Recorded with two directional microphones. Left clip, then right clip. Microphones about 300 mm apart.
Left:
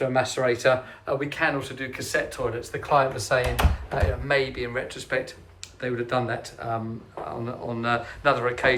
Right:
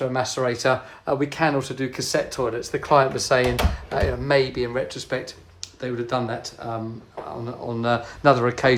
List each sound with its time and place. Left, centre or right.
0.0 s speech: centre